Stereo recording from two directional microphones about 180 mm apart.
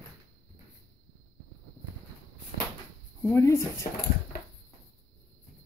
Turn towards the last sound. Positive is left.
turn(degrees=15)  # may be behind; listen again after turning